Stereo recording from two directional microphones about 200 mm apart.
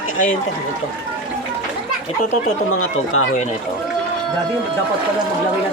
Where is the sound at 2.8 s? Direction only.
90° left.